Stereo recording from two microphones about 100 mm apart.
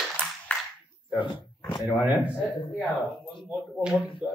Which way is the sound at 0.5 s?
15° left (ahead or behind).